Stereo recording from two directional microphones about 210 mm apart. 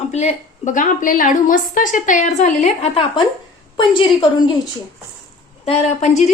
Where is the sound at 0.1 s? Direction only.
30° left (ahead or behind).